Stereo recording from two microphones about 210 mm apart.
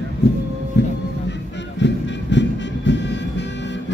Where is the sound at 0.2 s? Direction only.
50° left (ahead or behind).